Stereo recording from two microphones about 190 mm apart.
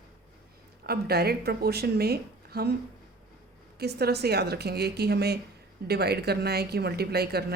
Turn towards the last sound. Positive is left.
turn(degrees=-55)  # may be behind; listen again after turning